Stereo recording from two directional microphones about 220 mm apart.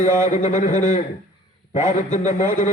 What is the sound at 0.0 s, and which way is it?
A man's voice, 35° left (ahead or behind).